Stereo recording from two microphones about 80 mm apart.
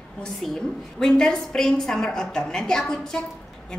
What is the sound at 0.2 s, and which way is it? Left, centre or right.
A woman's voice, centre.